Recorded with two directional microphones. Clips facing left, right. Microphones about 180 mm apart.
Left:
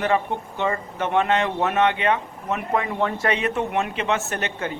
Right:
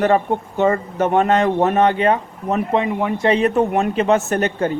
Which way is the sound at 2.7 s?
20° right (ahead or behind).